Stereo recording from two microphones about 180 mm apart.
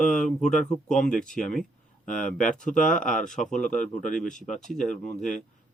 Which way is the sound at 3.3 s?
5° left (ahead or behind).